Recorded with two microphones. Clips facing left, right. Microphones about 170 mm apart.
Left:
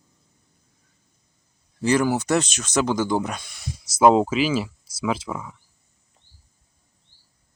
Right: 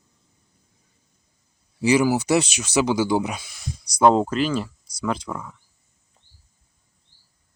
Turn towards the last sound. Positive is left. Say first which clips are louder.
# left 1 dB
turn(degrees=5)  # may be behind; listen again after turning